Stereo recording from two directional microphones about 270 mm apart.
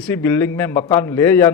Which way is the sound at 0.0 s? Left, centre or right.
Centre.